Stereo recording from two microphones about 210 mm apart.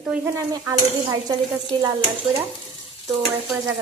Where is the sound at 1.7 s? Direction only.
10° left (ahead or behind).